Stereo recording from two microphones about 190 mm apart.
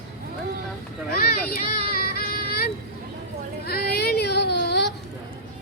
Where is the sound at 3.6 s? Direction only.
55° left (ahead or behind).